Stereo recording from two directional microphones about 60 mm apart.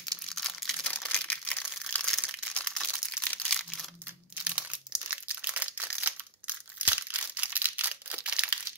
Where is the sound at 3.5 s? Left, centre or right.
Centre.